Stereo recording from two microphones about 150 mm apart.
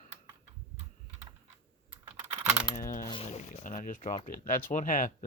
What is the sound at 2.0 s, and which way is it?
Computer keyboard, 40° right (ahead or behind).